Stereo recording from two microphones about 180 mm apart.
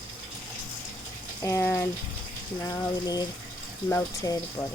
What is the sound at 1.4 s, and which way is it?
Speech, 15° left (ahead or behind).